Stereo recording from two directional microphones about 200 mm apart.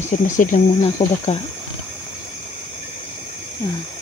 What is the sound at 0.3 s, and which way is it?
Speech, 40° left (ahead or behind).